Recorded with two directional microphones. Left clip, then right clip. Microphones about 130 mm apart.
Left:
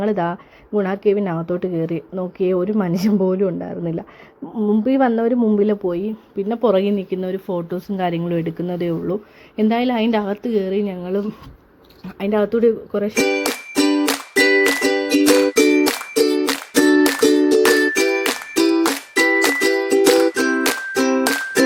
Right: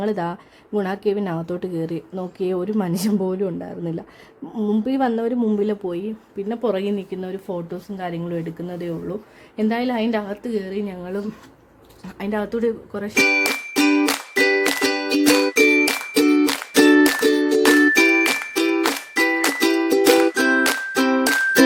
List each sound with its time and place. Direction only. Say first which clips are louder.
0.0 s a woman's voice: left 4 dB; 5° left (ahead or behind)
4.5 s a woman's voice: left 4 dB; 5° right (ahead or behind)
4.9 s speech: left 5 dB; 10° left (ahead or behind)
6.0 s speech: left 4 dB; 25° left (ahead or behind)
7.9 s speech: left 9 dB; 45° left (ahead or behind)
9.6 s speech: left 4 dB; 25° left (ahead or behind)
13.4 s music: even; 10° left (ahead or behind)